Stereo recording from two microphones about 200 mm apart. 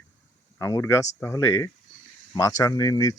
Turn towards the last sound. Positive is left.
turn(degrees=20)  # may be behind; listen again after turning